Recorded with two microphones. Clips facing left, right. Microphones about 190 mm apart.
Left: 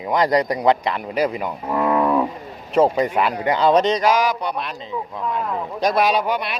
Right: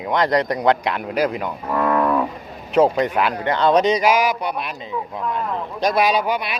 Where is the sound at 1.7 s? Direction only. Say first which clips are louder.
Even; 15° left (ahead or behind).